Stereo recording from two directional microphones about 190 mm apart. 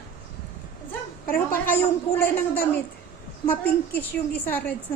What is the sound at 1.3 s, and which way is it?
Speech, 50° left (ahead or behind).